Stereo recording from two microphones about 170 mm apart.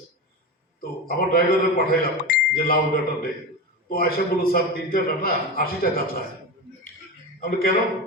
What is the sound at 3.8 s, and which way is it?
A man's voice, 60° left (ahead or behind).